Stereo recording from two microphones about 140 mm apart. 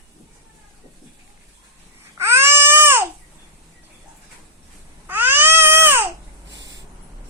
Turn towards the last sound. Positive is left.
turn(degrees=-15)  # may be behind; listen again after turning